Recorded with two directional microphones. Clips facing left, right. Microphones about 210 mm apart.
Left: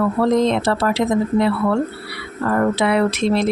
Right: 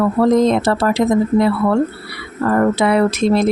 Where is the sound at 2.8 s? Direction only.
45° right (ahead or behind).